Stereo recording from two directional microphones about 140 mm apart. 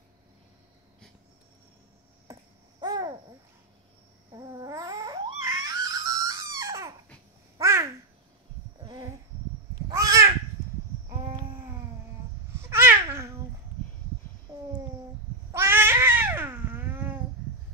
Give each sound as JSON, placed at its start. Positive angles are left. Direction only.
{"t": 2.3, "sound": "babbling", "side_deg": -20}
{"t": 4.3, "sound": "babbling", "side_deg": -25}
{"t": 7.5, "sound": "a sound", "side_deg": -20}
{"t": 8.8, "sound": "insect", "side_deg": -30}
{"t": 9.8, "sound": "crow", "side_deg": -25}
{"t": 12.5, "sound": "babbling", "side_deg": -15}
{"t": 15.5, "sound": "cat", "side_deg": -15}